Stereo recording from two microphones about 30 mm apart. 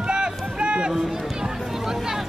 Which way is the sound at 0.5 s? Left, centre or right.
Right.